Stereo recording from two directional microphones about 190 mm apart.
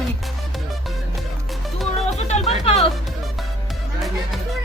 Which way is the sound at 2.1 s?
35° left (ahead or behind).